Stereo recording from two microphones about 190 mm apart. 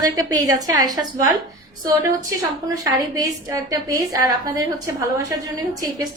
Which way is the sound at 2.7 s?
20° right (ahead or behind).